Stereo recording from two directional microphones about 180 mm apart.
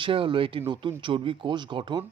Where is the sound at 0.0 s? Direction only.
30° right (ahead or behind).